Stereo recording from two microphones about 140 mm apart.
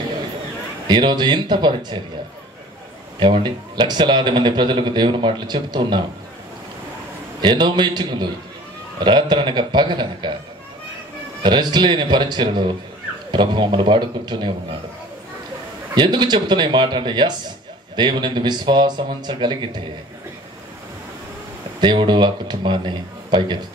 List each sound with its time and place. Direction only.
0.8 s a man's voice: 30° right (ahead or behind)
3.4 s a man's voice: 30° right (ahead or behind)
7.4 s a man's voice: 35° right (ahead or behind)
11.4 s a man's voice: 35° right (ahead or behind)
15.9 s a man's voice: 30° right (ahead or behind)
21.7 s a man's voice: 30° right (ahead or behind)